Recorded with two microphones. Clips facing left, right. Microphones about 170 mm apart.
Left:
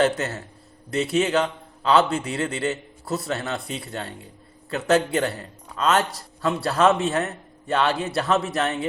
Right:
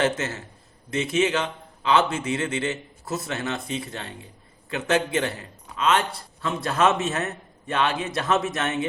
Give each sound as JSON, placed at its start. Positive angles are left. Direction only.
{"t": 0.0, "sound": "a man's voice", "side_deg": 35}
{"t": 5.1, "sound": "a man's voice", "side_deg": 40}